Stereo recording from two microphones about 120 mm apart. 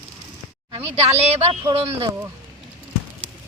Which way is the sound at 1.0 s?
60° right (ahead or behind).